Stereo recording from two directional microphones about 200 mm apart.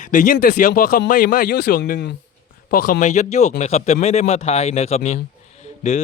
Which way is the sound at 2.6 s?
45° left (ahead or behind).